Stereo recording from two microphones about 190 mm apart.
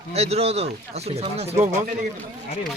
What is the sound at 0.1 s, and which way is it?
Speech, 35° right (ahead or behind).